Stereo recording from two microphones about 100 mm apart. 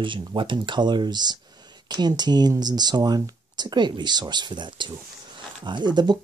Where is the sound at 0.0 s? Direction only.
55° right (ahead or behind).